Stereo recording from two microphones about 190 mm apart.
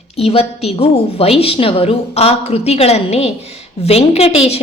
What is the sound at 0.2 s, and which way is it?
A woman's voice, 30° left (ahead or behind).